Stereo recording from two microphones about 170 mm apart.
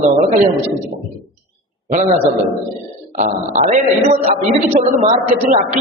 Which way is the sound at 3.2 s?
45° right (ahead or behind).